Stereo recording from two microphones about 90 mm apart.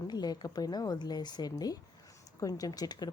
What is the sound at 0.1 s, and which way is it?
Speech, 50° left (ahead or behind).